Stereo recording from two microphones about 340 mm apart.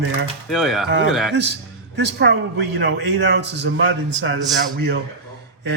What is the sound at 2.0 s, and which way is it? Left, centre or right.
A man's voice, right.